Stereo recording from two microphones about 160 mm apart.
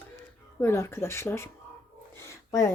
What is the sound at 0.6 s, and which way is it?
Speech, 15° left (ahead or behind).